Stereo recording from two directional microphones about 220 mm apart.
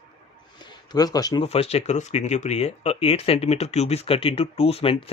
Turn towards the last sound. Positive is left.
turn(degrees=25)  # may be behind; listen again after turning